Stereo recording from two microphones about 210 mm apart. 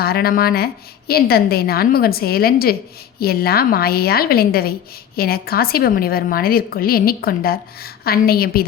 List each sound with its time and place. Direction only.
0.0 s a woman's voice: 45° left (ahead or behind)